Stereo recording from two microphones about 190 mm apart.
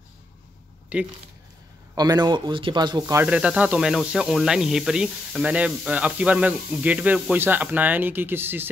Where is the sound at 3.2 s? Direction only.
5° right (ahead or behind).